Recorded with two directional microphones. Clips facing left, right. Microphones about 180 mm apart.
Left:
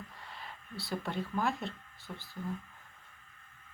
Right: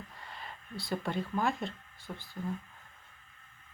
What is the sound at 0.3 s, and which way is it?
Speech, centre (ahead or behind).